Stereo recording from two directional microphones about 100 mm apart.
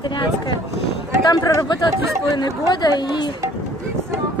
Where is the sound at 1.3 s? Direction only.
40° left (ahead or behind).